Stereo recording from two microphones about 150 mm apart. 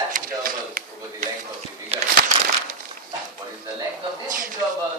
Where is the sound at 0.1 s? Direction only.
65° right (ahead or behind).